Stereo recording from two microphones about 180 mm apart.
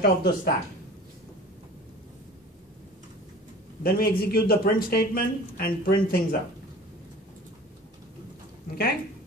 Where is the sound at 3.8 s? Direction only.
55° left (ahead or behind).